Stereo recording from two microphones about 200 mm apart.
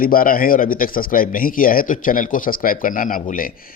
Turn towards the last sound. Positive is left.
turn(degrees=45)  # may be behind; listen again after turning